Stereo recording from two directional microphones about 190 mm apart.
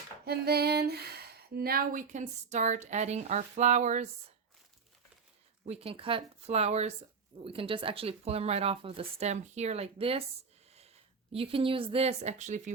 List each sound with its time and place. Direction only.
0.3 s speech: 55° right (ahead or behind); by 4.1 s 40° right (ahead or behind)
5.6 s speech: 30° right (ahead or behind)